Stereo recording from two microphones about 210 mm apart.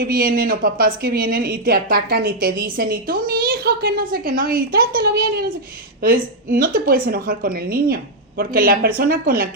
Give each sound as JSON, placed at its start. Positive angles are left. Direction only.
{"t": 0.0, "sound": "speech", "side_deg": -45}